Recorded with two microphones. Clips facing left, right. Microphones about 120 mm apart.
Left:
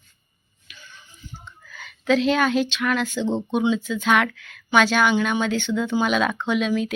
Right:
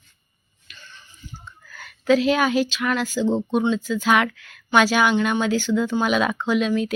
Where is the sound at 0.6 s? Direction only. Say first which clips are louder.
Even; 5° left (ahead or behind).